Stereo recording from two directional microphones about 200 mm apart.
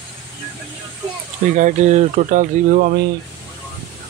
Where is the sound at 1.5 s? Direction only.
40° right (ahead or behind).